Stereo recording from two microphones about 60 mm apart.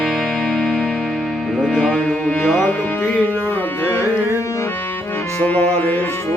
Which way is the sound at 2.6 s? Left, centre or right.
Left.